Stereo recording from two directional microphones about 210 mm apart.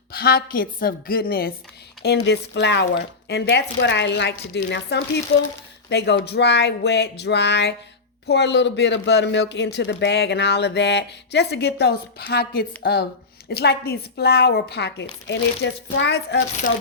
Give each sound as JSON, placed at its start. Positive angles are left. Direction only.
{"t": 0.1, "sound": "speech", "side_deg": 45}